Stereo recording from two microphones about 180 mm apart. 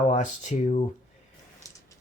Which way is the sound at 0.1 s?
40° left (ahead or behind).